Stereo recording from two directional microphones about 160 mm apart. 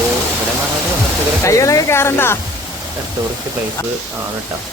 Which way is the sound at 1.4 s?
20° left (ahead or behind).